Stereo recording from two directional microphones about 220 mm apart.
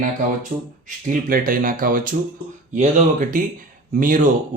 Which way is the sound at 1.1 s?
40° right (ahead or behind).